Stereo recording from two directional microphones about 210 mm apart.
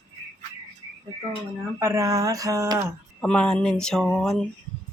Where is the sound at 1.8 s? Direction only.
15° right (ahead or behind).